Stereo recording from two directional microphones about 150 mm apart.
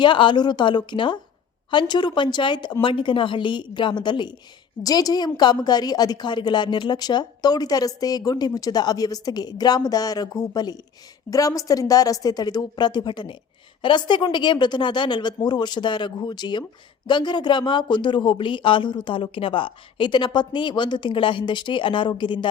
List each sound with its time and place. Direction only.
0.0 s a woman's voice: 30° left (ahead or behind)